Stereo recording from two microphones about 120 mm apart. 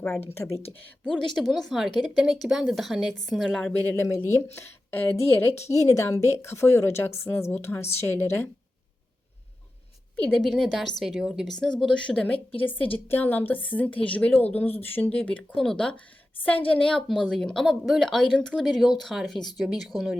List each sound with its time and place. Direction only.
1.0 s speech: centre (ahead or behind)
3.7 s a woman's voice: 15° left (ahead or behind)
10.3 s speech: centre (ahead or behind)
11.8 s a woman's voice: 5° left (ahead or behind)